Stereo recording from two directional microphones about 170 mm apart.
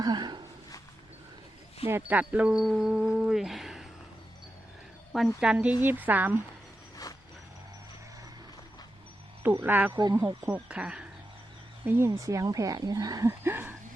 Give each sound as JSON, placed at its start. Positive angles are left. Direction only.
{"t": 0.0, "sound": "a sound", "side_deg": -25}
{"t": 1.9, "sound": "speech", "side_deg": -10}
{"t": 5.4, "sound": "speech", "side_deg": -5}
{"t": 9.4, "sound": "speech", "side_deg": -10}
{"t": 9.9, "sound": "speech", "side_deg": -25}